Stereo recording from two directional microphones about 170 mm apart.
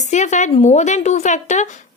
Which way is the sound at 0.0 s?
45° left (ahead or behind).